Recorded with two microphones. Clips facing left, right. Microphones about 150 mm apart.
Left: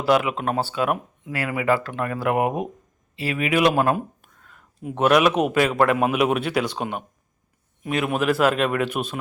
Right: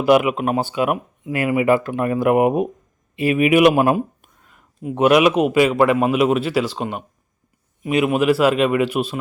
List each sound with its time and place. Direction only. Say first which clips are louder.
0.0 s a man's voice: right 5 dB; 15° right (ahead or behind)